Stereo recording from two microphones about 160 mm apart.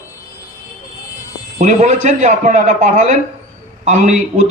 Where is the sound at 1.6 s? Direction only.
45° right (ahead or behind).